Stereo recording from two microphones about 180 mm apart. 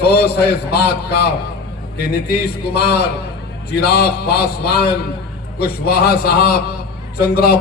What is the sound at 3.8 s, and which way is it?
A man's voice, 60° left (ahead or behind).